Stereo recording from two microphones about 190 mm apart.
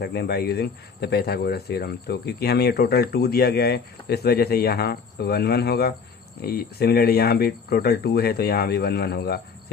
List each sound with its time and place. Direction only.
0.0 s speech: 60° left (ahead or behind)